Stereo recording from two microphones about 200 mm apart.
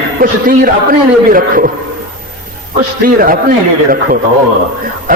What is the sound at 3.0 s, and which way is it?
Speech, 45° right (ahead or behind).